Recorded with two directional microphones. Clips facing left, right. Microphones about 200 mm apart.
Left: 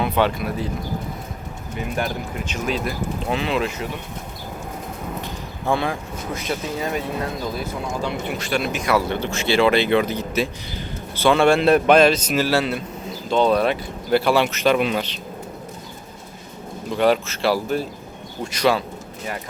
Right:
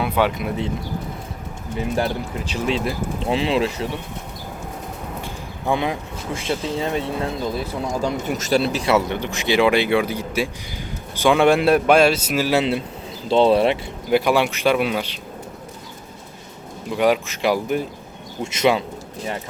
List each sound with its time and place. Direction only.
0.0 s speech: 10° right (ahead or behind)
0.3 s speech: 20° right (ahead or behind)
1.8 s speech: 30° right (ahead or behind)
5.2 s a man's voice: 15° right (ahead or behind)
14.1 s a man's voice: 15° right (ahead or behind)
16.9 s a man's voice: 10° right (ahead or behind)